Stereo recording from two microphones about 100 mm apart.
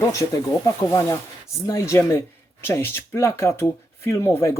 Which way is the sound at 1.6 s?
35° left (ahead or behind).